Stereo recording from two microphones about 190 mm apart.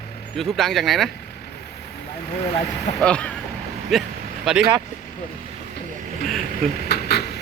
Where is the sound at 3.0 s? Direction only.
5° left (ahead or behind).